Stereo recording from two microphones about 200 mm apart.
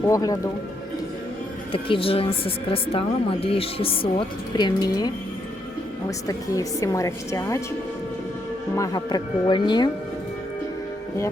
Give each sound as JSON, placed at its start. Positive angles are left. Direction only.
{"t": 0.1, "sound": "a woman's voice", "side_deg": 15}
{"t": 1.7, "sound": "a woman's voice", "side_deg": 30}
{"t": 8.7, "sound": "speech", "side_deg": 15}